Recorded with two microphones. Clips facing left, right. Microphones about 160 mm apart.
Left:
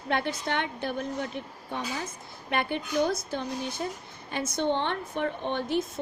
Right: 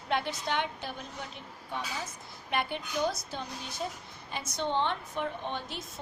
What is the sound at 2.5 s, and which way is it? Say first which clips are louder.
A woman's voice: left 4 dB; 55° left (ahead or behind).